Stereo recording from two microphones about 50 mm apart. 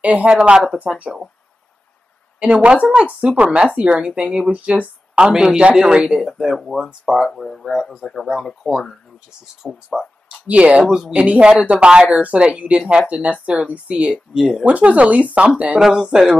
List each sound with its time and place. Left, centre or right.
0.0 s speech: right
2.4 s speech: right
5.3 s speech: centre
6.2 s speech: centre
6.9 s speech: centre
7.3 s speech: centre
9.6 s speech: centre
10.4 s speech: right
14.3 s speech: centre
14.6 s speech: right
15.9 s speech: centre